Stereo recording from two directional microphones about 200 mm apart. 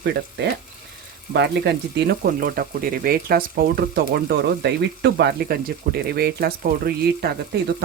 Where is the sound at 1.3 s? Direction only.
60° right (ahead or behind).